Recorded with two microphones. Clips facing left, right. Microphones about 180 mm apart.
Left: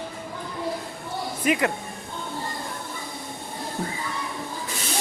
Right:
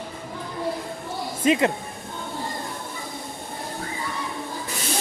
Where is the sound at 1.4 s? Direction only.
25° right (ahead or behind).